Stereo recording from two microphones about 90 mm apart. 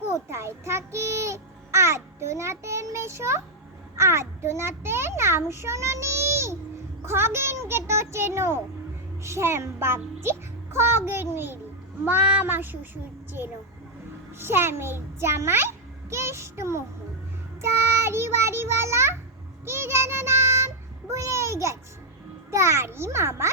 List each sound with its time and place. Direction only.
0.1 s a sound: 30° right (ahead or behind)
3.9 s a child's voice: 30° right (ahead or behind)
17.6 s child singing: 30° right (ahead or behind)
22.5 s a child's voice: 30° right (ahead or behind)